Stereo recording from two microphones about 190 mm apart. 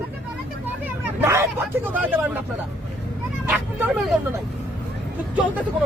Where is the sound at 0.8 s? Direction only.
10° right (ahead or behind).